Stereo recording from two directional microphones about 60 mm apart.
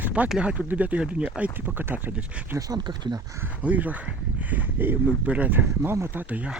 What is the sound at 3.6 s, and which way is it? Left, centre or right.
Speech, right.